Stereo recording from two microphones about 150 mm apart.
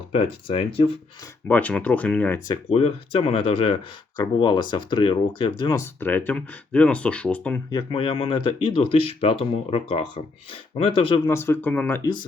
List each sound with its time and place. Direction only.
0.4 s speech: 40° left (ahead or behind)
1.5 s speech: 10° left (ahead or behind)
2.6 s speech: 40° left (ahead or behind)
5.8 s speech: 10° left (ahead or behind)
7.7 s speech: 35° left (ahead or behind)
11.3 s speech: 15° left (ahead or behind)